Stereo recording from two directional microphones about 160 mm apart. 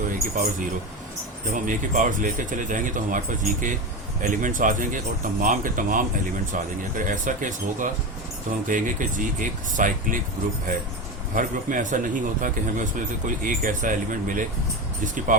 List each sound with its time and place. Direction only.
1.5 s speech: 55° right (ahead or behind)
11.3 s speech: 55° right (ahead or behind)